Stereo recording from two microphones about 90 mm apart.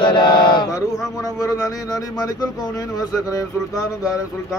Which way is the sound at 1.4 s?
40° left (ahead or behind).